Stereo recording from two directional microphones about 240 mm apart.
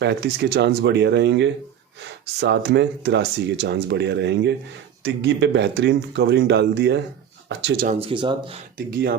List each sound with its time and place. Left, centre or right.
0.0 s speech: right
7.9 s speech: right